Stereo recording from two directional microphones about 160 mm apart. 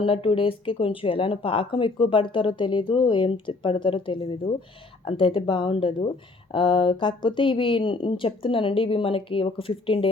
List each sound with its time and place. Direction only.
0.0 s speech: 35° left (ahead or behind)